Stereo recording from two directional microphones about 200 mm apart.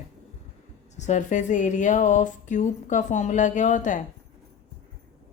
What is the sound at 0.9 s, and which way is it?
A woman's voice, 35° left (ahead or behind).